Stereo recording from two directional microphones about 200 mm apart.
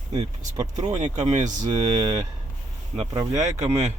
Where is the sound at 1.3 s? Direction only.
35° right (ahead or behind).